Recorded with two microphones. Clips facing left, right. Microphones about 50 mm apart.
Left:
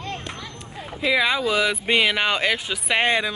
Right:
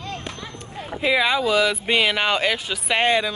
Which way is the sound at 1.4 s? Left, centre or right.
Centre.